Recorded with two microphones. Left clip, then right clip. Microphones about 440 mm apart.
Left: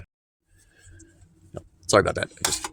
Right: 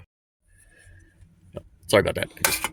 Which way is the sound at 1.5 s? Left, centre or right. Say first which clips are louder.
Even; right.